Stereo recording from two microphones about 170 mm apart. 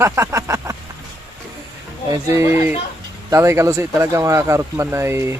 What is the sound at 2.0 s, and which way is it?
Speech, 15° right (ahead or behind).